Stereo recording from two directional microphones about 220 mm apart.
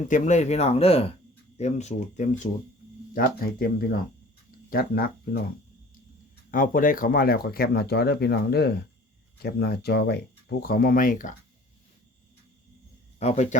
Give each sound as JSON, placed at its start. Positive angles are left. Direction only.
{"t": 0.1, "sound": "speech", "side_deg": 30}
{"t": 6.5, "sound": "speech", "side_deg": 40}
{"t": 13.1, "sound": "speech", "side_deg": 30}